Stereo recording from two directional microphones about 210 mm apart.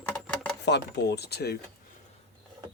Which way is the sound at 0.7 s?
55° left (ahead or behind).